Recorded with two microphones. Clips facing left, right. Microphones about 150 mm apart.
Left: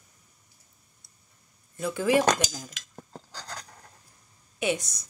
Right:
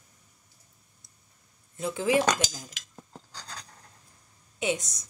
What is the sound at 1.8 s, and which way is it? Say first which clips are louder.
Speech: left 2 dB; 20° right (ahead or behind).